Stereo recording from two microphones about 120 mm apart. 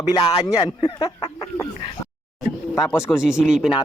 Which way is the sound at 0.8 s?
40° left (ahead or behind).